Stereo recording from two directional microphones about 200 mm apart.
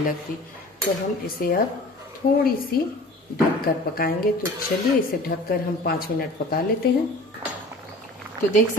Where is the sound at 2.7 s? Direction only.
50° left (ahead or behind).